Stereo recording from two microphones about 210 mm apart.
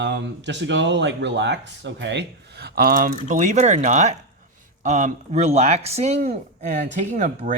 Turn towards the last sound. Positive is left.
turn(degrees=-35)  # may be behind; listen again after turning